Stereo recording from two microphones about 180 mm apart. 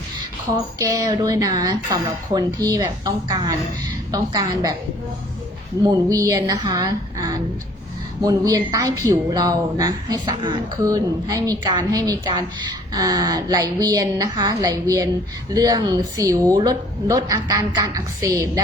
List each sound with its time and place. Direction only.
0.5 s a woman's voice: 20° right (ahead or behind)
5.8 s a woman's voice: 20° right (ahead or behind)